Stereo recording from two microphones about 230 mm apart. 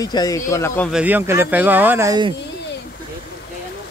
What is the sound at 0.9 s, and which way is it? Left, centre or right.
Speech, centre.